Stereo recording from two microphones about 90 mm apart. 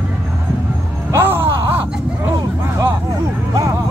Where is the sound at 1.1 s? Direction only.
25° right (ahead or behind).